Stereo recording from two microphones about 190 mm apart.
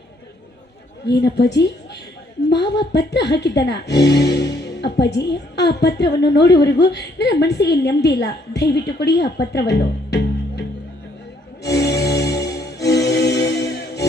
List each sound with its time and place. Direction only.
1.0 s a woman's voice: 65° left (ahead or behind)
2.5 s a woman's voice: 65° left (ahead or behind)
12.2 s music: 60° left (ahead or behind)